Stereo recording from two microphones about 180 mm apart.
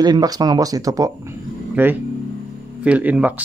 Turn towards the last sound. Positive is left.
turn(degrees=-10)  # may be behind; listen again after turning